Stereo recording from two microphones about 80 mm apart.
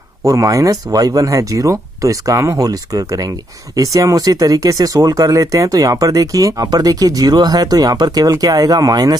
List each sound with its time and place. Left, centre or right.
0.2 s speech: right